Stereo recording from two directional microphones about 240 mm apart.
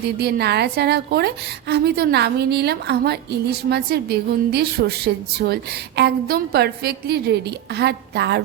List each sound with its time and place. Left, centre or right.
0.2 s a woman's voice: right